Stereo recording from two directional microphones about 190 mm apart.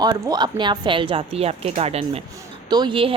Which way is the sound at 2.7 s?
25° right (ahead or behind).